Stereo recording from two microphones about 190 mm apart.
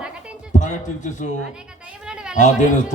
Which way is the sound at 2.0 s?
5° right (ahead or behind).